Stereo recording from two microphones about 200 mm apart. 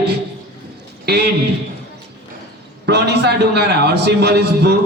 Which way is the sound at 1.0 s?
55° right (ahead or behind).